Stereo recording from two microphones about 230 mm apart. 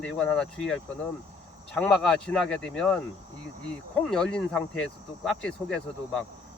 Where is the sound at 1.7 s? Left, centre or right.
Centre.